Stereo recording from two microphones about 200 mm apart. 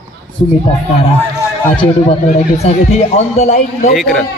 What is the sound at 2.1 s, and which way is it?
A man's voice, 30° left (ahead or behind).